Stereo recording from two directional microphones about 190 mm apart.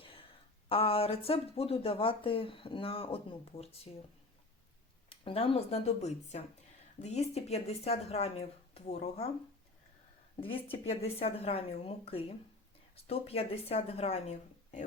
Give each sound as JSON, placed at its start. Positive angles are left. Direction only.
{"t": 0.0, "sound": "a sound", "side_deg": 30}
{"t": 0.7, "sound": "speech", "side_deg": 30}
{"t": 5.0, "sound": "speech", "side_deg": 30}
{"t": 10.4, "sound": "speech", "side_deg": 30}